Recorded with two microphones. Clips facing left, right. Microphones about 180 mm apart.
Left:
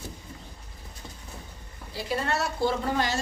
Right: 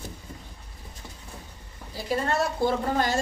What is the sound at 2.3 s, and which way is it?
Speech, 50° right (ahead or behind).